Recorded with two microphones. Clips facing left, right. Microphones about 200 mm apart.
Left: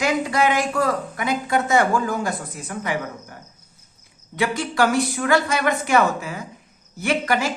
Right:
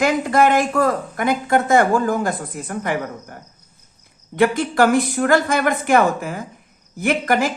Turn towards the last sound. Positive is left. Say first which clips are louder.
# right 3 dB
turn(degrees=-50)  # may be behind; listen again after turning